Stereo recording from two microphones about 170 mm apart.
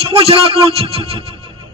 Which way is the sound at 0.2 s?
35° right (ahead or behind).